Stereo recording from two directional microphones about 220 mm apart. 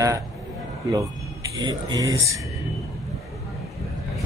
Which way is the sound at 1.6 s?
20° right (ahead or behind).